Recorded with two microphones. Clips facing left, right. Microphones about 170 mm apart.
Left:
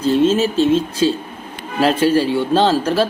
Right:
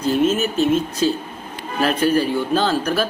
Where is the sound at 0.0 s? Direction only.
30° left (ahead or behind).